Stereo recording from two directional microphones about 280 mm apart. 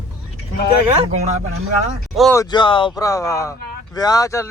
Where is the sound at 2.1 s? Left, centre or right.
Centre.